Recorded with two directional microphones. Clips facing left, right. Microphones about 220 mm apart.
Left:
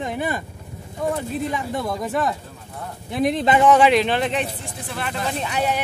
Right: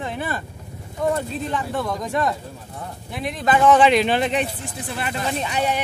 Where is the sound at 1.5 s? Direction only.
10° left (ahead or behind).